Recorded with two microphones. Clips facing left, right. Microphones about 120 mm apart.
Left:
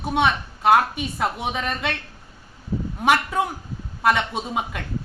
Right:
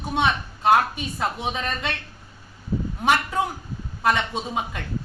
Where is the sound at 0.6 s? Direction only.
5° left (ahead or behind).